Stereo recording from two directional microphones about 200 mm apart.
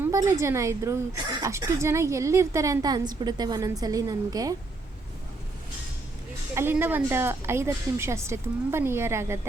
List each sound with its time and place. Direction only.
0.0 s a woman's voice: 15° right (ahead or behind)
6.5 s a woman's voice: 10° right (ahead or behind)